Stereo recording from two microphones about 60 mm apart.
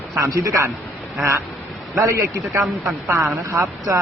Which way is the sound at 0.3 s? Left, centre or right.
Right.